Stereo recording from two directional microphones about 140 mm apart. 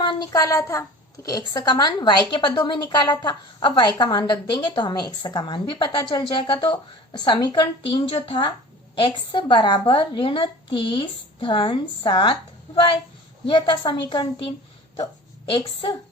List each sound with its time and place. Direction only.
0.0 s a woman's voice: 30° left (ahead or behind)
13.5 s a woman's voice: 35° left (ahead or behind)
15.5 s a woman's voice: 30° left (ahead or behind)